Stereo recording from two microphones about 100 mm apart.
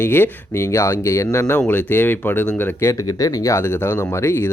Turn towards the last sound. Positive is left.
turn(degrees=25)  # may be behind; listen again after turning